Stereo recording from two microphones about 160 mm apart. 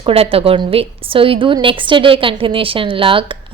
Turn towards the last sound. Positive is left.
turn(degrees=-35)  # may be behind; listen again after turning